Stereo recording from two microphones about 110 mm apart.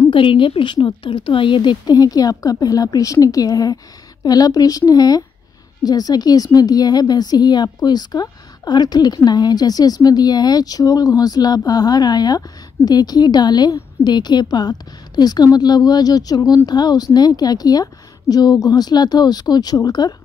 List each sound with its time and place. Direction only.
0.1 s a woman's voice: 50° left (ahead or behind)